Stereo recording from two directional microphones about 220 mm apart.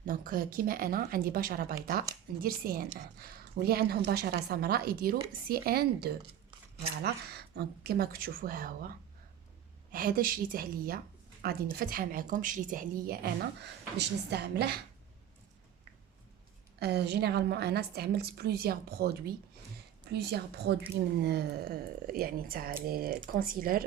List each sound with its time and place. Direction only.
0.0 s a woman's voice: 40° right (ahead or behind)
16.8 s a woman's voice: 50° right (ahead or behind)